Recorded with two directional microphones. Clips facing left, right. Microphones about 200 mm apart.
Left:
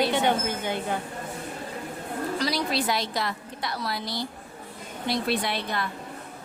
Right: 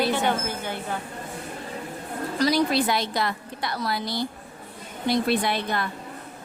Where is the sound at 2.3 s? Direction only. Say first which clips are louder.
Right 7 dB; 50° right (ahead or behind).